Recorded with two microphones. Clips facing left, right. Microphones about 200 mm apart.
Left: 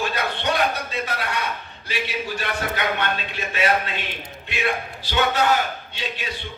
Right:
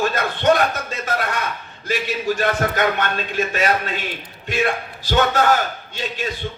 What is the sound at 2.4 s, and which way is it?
A man's voice, 45° right (ahead or behind).